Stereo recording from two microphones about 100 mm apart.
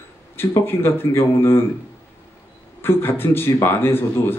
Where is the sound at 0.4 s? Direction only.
20° left (ahead or behind).